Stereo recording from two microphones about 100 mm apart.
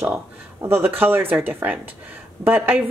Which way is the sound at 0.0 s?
25° right (ahead or behind).